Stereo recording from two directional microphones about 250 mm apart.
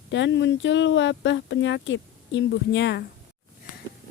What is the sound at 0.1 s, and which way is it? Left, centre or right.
Speech, left.